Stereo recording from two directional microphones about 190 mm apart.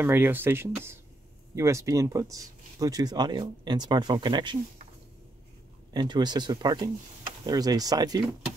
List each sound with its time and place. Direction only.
0.0 s speech: 10° right (ahead or behind)
5.9 s speech: 20° right (ahead or behind)